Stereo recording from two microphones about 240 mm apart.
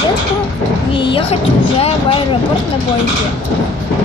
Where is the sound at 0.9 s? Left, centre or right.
Left.